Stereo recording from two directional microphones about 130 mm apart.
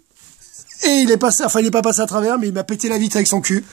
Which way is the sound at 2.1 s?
20° right (ahead or behind).